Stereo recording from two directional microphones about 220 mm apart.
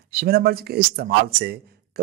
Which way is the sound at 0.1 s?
45° right (ahead or behind).